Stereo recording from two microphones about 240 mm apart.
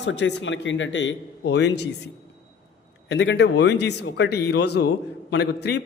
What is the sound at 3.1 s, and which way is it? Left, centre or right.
A man's voice, left.